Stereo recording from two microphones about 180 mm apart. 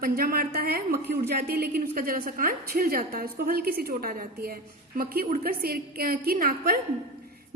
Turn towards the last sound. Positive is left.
turn(degrees=-55)  # may be behind; listen again after turning